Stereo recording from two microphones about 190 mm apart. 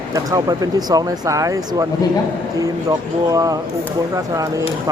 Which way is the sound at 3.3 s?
20° right (ahead or behind).